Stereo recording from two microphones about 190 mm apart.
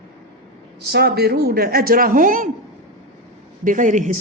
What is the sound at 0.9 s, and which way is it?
A woman's voice, 55° right (ahead or behind).